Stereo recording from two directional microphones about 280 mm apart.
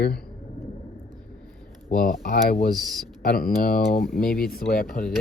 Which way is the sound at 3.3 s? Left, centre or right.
Left.